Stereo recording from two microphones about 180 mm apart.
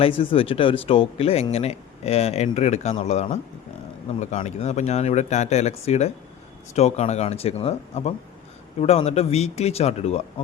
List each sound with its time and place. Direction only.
0.0 s speech: 30° left (ahead or behind)